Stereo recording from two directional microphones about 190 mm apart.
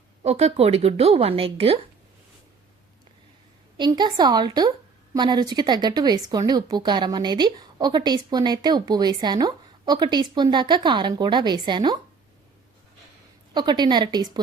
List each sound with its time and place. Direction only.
0.2 s speech: 35° right (ahead or behind)
3.8 s a woman's voice: 20° right (ahead or behind)
13.5 s a woman's voice: 20° right (ahead or behind)